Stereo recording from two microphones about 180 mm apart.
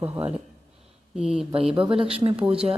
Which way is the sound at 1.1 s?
5° right (ahead or behind).